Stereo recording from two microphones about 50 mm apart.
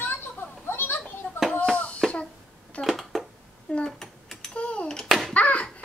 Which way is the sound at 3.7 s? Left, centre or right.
Left.